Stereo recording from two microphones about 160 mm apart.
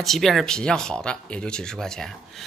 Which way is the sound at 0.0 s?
Centre (ahead or behind).